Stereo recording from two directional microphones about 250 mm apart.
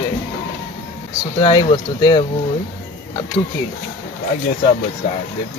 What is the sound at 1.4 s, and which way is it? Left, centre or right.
Speech, centre.